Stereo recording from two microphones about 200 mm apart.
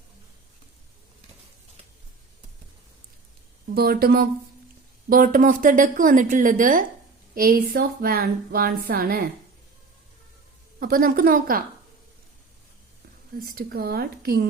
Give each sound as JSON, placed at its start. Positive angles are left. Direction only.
{"t": 3.8, "sound": "a woman's voice", "side_deg": -50}
{"t": 10.8, "sound": "a woman's voice", "side_deg": -45}
{"t": 13.4, "sound": "a woman's voice", "side_deg": -50}